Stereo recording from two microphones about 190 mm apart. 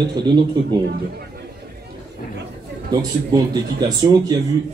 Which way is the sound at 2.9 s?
20° right (ahead or behind).